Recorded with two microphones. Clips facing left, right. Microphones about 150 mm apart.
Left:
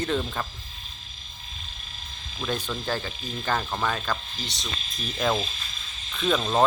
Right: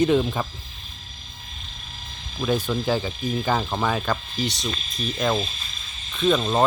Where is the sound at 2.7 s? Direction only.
10° right (ahead or behind).